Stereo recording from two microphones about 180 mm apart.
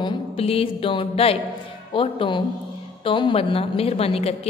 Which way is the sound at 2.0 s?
30° left (ahead or behind).